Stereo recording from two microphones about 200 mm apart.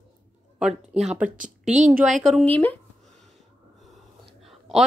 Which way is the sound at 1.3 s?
40° right (ahead or behind).